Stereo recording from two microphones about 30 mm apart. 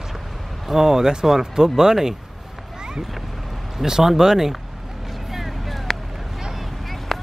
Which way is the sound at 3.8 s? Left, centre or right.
Centre.